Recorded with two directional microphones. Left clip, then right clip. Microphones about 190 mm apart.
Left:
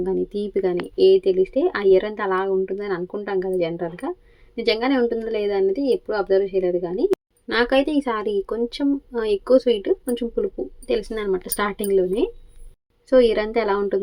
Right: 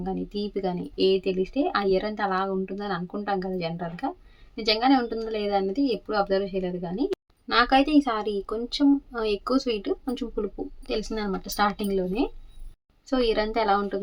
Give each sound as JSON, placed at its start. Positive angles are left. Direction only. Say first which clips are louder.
{"t": 0.0, "sound": "speech", "louder": "left 8 dB", "side_deg": 20}